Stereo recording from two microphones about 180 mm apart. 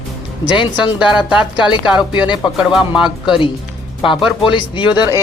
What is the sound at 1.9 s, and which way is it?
Speech, 5° right (ahead or behind).